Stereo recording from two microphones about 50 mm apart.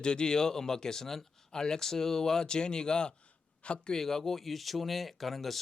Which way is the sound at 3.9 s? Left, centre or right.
Centre.